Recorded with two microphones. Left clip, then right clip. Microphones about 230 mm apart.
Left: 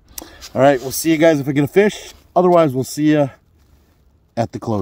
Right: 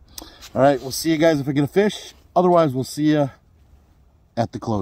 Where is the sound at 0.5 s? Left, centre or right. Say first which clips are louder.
Left 4 dB; left.